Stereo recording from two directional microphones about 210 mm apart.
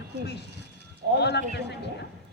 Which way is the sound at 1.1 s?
55° left (ahead or behind).